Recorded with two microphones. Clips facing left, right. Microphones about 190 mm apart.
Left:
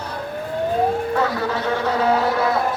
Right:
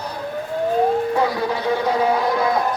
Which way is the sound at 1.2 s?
10° right (ahead or behind).